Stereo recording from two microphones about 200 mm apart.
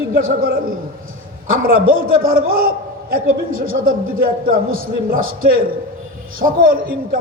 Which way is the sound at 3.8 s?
45° right (ahead or behind).